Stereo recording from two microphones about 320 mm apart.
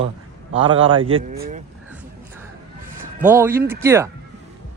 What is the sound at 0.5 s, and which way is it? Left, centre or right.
Speech, centre.